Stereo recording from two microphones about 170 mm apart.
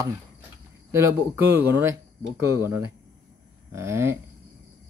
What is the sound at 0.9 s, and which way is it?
Speech, 15° right (ahead or behind).